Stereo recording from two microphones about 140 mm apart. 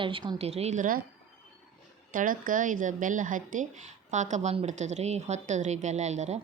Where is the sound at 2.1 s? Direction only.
80° right.